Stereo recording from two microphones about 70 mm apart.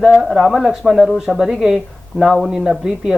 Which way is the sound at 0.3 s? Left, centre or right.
Centre.